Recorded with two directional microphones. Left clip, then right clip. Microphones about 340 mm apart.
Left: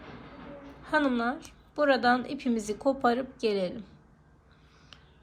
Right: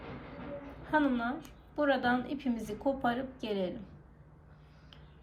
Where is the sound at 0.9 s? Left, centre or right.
Centre.